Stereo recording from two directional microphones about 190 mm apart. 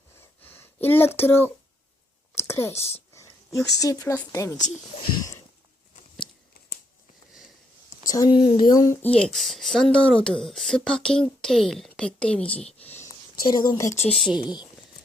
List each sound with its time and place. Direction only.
0.2 s a sound: 10° left (ahead or behind)
2.3 s whispering: 15° left (ahead or behind)
3.7 s speech: 20° left (ahead or behind)
4.6 s speech: 40° left (ahead or behind)
8.0 s speech: 20° left (ahead or behind)
13.4 s a woman's voice: 25° left (ahead or behind)
14.1 s speech: centre (ahead or behind)